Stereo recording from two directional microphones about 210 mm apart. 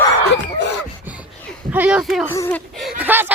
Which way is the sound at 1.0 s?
5° right (ahead or behind).